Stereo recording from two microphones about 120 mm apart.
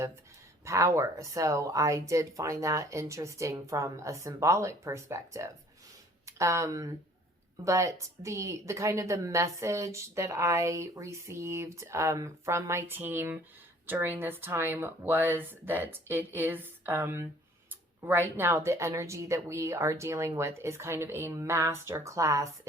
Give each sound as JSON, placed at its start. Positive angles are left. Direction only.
{"t": 0.6, "sound": "speech", "side_deg": -25}